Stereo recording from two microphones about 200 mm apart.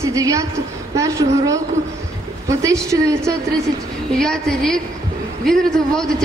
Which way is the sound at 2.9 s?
15° right (ahead or behind).